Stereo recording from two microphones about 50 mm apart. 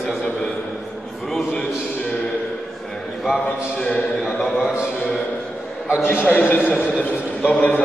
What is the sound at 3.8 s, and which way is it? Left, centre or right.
Speech, left.